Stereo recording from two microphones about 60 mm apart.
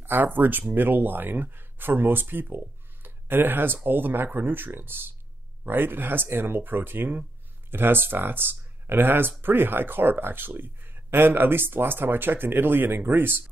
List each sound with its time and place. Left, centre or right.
0.0 s speech: right